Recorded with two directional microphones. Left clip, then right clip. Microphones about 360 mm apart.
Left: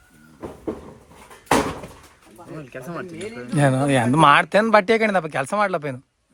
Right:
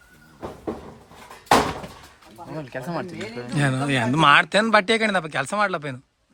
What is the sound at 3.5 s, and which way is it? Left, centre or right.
Speech, centre.